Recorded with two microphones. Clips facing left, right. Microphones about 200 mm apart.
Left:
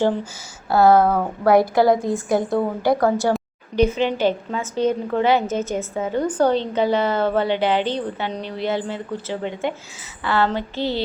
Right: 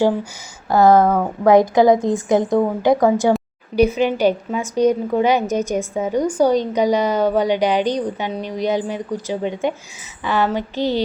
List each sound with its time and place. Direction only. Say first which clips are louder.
0.7 s a woman's voice: right 2 dB; 15° right (ahead or behind)
1.0 s speech: right 3 dB; centre (ahead or behind)
1.5 s a woman's voice: right 3 dB; 20° right (ahead or behind)